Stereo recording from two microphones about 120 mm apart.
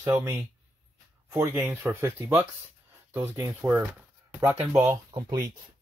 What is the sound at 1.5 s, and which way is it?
Speech, 15° right (ahead or behind).